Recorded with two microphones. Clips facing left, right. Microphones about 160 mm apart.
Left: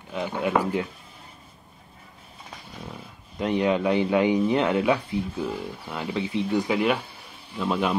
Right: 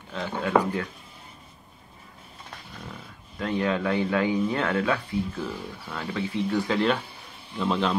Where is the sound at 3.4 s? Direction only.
20° left (ahead or behind).